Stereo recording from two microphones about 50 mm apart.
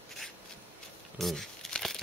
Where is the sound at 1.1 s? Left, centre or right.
Centre.